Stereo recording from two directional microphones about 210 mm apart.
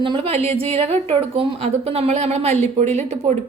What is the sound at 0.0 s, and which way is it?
A woman's voice, 25° right (ahead or behind).